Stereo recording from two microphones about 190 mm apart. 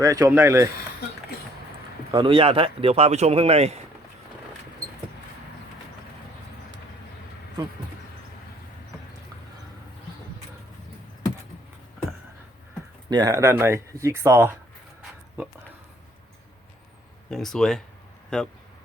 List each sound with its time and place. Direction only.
0.0 s speech: 15° right (ahead or behind)
2.1 s speech: 25° right (ahead or behind)
13.1 s speech: 20° right (ahead or behind)
17.3 s speech: centre (ahead or behind)